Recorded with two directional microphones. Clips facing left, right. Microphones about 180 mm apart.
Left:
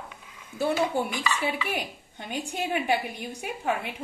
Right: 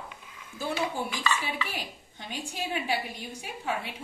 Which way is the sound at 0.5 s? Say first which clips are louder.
Left 6 dB; 60° left (ahead or behind).